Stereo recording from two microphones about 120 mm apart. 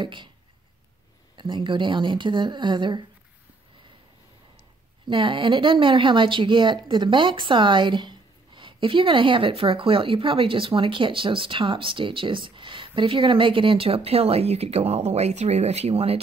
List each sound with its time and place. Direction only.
0.0 s a woman's voice: 40° right (ahead or behind)
1.3 s a woman's voice: 40° right (ahead or behind)
5.0 s speech: 45° right (ahead or behind)